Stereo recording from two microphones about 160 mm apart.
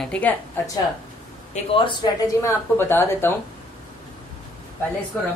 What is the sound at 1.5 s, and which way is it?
Speech, 35° left (ahead or behind).